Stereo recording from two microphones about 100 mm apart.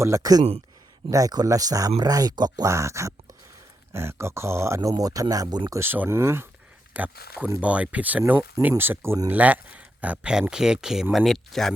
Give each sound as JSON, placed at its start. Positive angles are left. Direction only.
{"t": 0.0, "sound": "speech", "side_deg": -35}
{"t": 5.7, "sound": "speech", "side_deg": -20}